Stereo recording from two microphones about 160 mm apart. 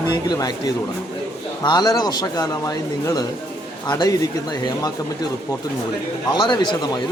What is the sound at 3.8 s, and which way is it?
Speech, 30° left (ahead or behind).